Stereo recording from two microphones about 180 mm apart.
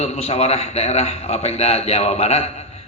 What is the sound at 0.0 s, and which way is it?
A man's voice, 35° left (ahead or behind).